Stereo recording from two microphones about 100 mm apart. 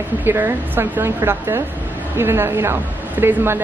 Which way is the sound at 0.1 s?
20° right (ahead or behind).